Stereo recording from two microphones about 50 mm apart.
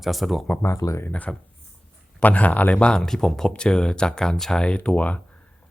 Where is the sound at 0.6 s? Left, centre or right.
Left.